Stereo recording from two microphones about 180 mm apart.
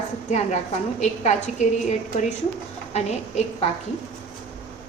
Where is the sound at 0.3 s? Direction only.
40° left (ahead or behind).